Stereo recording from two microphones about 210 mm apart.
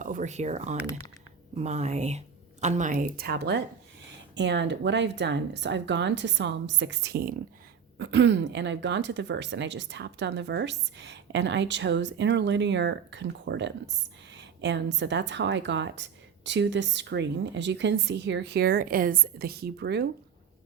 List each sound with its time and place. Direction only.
0.0 s speech: 40° right (ahead or behind)